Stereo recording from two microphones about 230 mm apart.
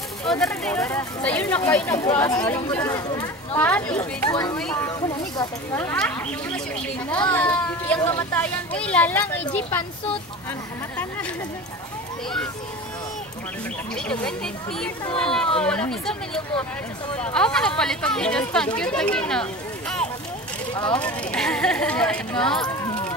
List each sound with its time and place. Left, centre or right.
0.2 s speech: centre
14.2 s speech: centre
20.9 s speech: centre
22.6 s a sound: centre